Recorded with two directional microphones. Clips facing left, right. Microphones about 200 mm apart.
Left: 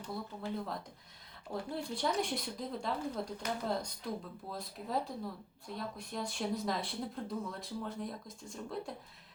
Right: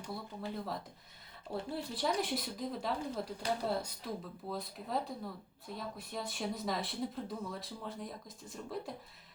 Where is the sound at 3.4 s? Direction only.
30° right (ahead or behind).